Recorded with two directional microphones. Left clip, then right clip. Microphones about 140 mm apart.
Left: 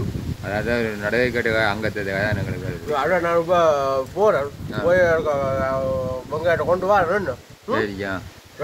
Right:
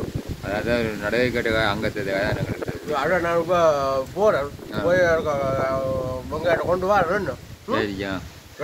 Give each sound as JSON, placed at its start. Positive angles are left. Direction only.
{"t": 0.5, "sound": "speech", "side_deg": -45}
{"t": 2.9, "sound": "speech", "side_deg": 0}
{"t": 7.7, "sound": "speech", "side_deg": -30}